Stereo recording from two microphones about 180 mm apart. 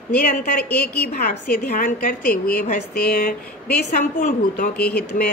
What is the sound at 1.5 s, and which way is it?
A woman's voice, 50° left (ahead or behind).